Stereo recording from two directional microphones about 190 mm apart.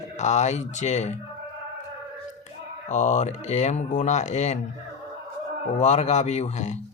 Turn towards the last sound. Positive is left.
turn(degrees=35)  # may be behind; listen again after turning